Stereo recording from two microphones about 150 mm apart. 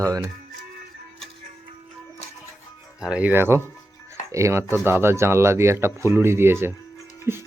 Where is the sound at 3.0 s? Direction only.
10° right (ahead or behind).